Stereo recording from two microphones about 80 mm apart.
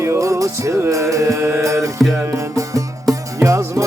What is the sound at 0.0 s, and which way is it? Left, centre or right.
Music, right.